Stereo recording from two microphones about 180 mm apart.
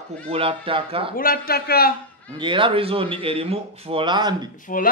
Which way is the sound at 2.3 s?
30° right (ahead or behind).